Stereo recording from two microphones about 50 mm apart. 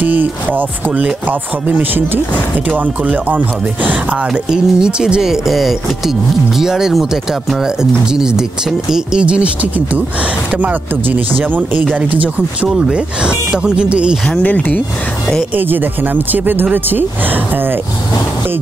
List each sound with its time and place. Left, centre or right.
0.0 s speech: right
4.3 s speech: centre
7.6 s speech: centre
9.2 s speech: right
12.6 s speech: centre
12.9 s speech: centre
14.4 s speech: left
15.5 s speech: right